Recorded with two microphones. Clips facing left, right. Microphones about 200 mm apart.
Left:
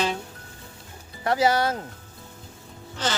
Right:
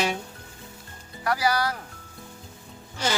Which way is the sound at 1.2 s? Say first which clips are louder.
Left 3 dB; 25° left (ahead or behind).